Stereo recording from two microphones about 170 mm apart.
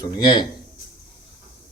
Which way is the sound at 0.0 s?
25° left (ahead or behind).